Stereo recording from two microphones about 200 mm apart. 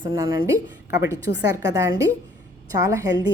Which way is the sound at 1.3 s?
60° left (ahead or behind).